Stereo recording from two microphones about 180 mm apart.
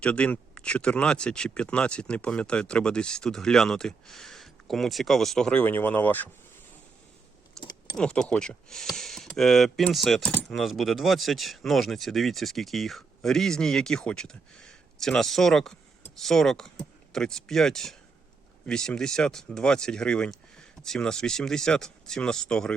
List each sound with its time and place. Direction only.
0.0 s speech: 5° left (ahead or behind)
7.6 s keys jangling: 25° left (ahead or behind)
7.9 s speech: 5° left (ahead or behind)